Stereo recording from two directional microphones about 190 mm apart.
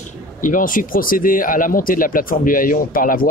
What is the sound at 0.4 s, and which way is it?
Speech, 45° left (ahead or behind).